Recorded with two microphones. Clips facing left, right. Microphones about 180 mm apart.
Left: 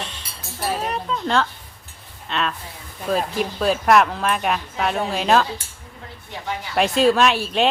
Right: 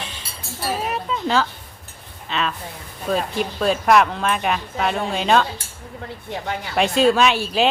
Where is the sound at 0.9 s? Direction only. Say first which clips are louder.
Right 1 dB; 5° right (ahead or behind).